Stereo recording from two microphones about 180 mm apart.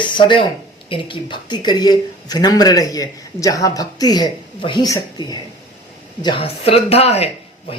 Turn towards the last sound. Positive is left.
turn(degrees=35)  # may be behind; listen again after turning